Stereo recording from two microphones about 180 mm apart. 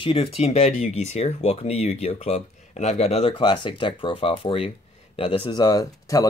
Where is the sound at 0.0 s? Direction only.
30° left (ahead or behind).